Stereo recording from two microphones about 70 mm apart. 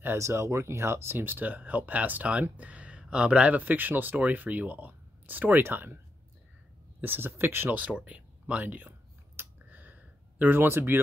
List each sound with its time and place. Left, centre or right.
0.0 s speech: right
7.0 s speech: right
7.9 s speech: centre
9.4 s a sound: right